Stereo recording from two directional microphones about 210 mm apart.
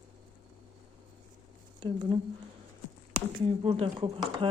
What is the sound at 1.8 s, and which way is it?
Speech, 20° right (ahead or behind).